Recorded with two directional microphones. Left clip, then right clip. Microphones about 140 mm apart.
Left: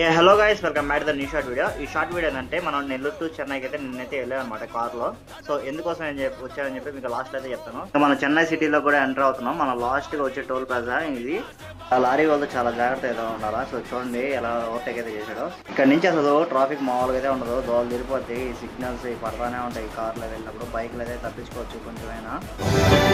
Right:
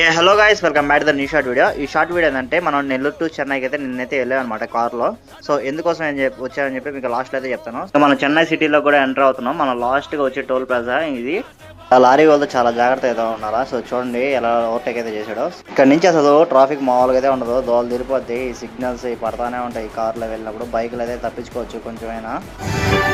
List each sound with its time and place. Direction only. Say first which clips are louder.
0.0 s speech: right 4 dB; 45° right (ahead or behind); by 20.1 s 25° right (ahead or behind)